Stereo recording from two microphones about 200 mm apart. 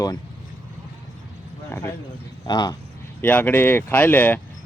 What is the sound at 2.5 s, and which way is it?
Speech, 20° left (ahead or behind).